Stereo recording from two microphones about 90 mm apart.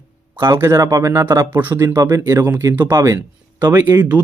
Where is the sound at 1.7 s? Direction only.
25° right (ahead or behind).